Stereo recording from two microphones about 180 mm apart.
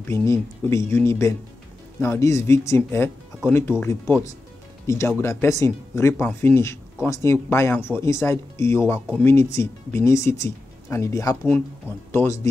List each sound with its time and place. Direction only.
0.1 s speech: 15° left (ahead or behind)